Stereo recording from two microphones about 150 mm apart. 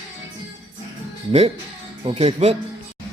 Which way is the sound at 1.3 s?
40° right (ahead or behind).